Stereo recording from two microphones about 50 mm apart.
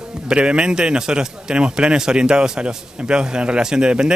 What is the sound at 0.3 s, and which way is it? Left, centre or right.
A man's voice, right.